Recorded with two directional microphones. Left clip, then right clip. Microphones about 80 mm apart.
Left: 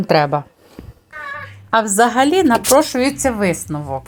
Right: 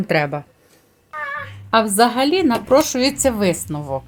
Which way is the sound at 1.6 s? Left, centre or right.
Left.